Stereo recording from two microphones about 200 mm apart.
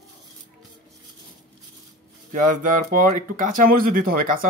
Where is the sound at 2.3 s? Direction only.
40° right (ahead or behind).